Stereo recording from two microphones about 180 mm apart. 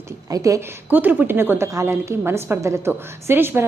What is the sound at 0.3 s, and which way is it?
A woman's voice, 20° right (ahead or behind).